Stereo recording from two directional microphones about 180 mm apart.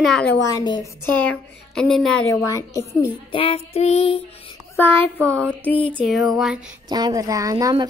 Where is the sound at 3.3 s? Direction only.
30° left (ahead or behind).